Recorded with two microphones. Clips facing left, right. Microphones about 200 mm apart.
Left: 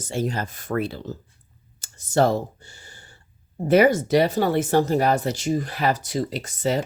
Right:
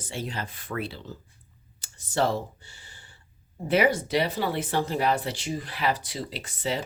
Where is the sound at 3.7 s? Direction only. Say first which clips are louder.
Left 6 dB; 45° left (ahead or behind).